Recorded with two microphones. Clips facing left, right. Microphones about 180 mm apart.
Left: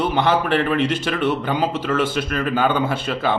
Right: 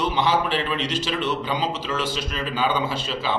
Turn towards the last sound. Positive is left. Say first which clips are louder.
# left 4 dB
turn(degrees=55)  # may be behind; listen again after turning